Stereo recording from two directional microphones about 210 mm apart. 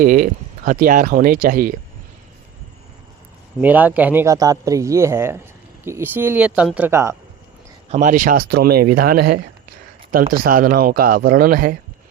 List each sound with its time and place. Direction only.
0.0 s speech: 40° right (ahead or behind)
3.6 s a man's voice: 10° right (ahead or behind)
7.9 s speech: 35° right (ahead or behind)
10.4 s speech: 45° right (ahead or behind)